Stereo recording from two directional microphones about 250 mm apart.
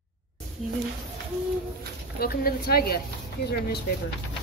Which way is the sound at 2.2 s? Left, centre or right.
Left.